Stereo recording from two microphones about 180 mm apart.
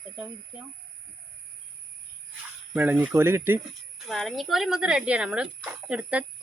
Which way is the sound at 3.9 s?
Centre (ahead or behind).